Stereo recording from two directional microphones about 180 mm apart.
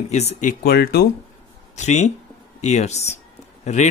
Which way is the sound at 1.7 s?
40° left (ahead or behind).